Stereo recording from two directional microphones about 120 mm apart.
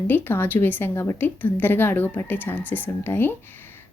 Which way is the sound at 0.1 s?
15° left (ahead or behind).